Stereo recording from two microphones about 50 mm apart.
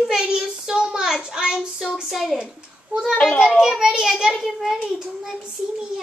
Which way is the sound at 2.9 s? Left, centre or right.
Centre.